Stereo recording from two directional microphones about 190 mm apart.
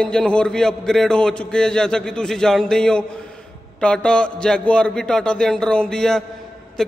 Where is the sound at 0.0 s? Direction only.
5° left (ahead or behind).